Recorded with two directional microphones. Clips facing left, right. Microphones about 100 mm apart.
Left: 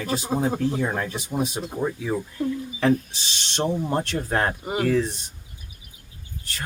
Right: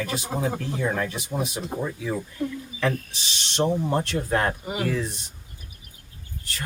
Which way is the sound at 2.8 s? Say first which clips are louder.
Left 5 dB; 35° left (ahead or behind).